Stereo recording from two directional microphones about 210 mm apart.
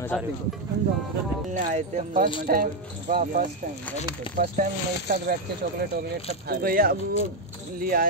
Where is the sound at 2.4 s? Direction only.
45° right (ahead or behind).